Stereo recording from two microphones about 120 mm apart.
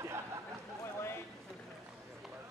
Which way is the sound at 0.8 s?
20° left (ahead or behind).